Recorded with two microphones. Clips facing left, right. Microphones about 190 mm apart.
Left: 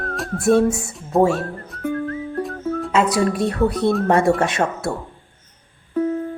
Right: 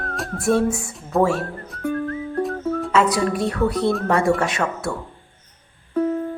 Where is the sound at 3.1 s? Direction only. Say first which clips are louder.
Left 2 dB; 25° left (ahead or behind).